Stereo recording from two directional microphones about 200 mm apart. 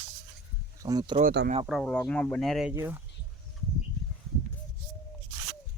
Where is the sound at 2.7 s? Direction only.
10° right (ahead or behind).